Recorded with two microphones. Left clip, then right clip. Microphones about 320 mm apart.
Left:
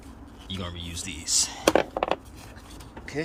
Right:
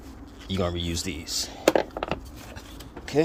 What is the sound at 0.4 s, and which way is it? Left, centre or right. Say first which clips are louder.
Speech: right 8 dB; centre.